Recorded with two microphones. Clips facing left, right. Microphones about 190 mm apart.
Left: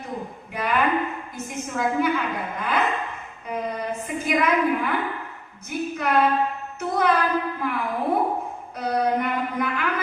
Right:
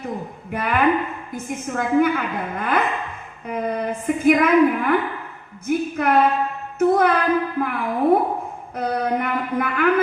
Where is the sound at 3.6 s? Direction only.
55° right (ahead or behind).